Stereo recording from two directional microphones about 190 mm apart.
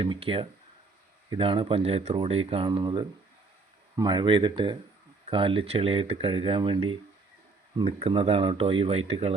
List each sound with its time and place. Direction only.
0.0 s speech: 30° right (ahead or behind)